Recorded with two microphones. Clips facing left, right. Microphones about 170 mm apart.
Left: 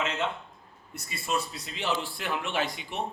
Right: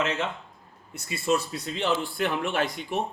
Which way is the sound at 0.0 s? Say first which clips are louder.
Right 2 dB; centre (ahead or behind).